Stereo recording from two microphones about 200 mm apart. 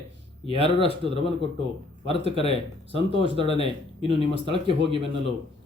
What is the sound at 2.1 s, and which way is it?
Speech, 30° left (ahead or behind).